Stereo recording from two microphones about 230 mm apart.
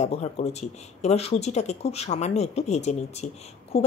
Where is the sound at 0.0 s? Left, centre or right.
Left.